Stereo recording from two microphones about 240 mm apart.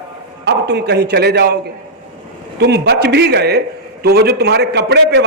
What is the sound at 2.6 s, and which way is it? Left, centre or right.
A man's voice, right.